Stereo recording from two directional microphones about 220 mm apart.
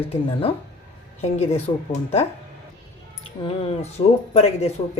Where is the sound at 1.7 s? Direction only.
25° left (ahead or behind).